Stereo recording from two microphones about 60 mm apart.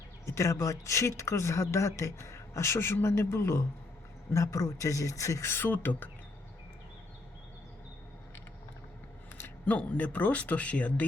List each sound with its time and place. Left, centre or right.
0.3 s speech: left
4.3 s speech: left
5.5 s speech: left
9.6 s speech: left